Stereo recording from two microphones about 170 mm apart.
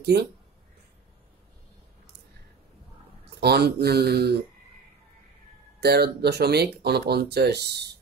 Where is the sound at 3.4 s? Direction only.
70° right (ahead or behind).